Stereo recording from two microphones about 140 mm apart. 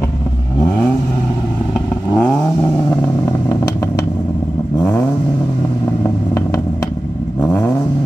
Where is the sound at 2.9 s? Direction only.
15° left (ahead or behind).